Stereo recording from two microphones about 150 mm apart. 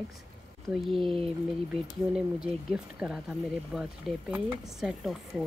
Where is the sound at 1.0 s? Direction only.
40° right (ahead or behind).